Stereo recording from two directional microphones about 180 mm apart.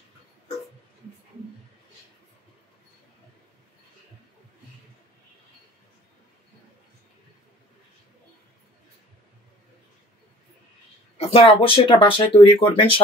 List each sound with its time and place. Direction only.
11.1 s speech: 30° left (ahead or behind)